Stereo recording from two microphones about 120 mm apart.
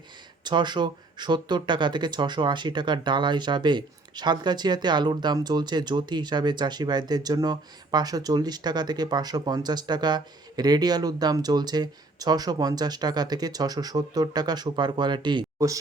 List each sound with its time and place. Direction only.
0.4 s speech: 40° right (ahead or behind)
15.5 s speech: 25° right (ahead or behind)